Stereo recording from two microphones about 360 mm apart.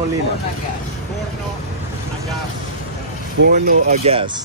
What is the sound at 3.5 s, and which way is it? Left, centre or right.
Speech, right.